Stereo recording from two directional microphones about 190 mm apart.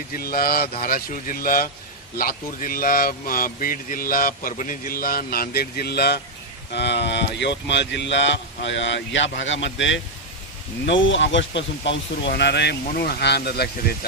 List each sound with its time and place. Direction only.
0.1 s speech: 50° left (ahead or behind)